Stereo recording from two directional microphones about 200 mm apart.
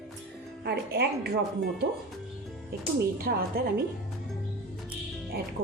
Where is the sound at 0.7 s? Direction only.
55° right (ahead or behind).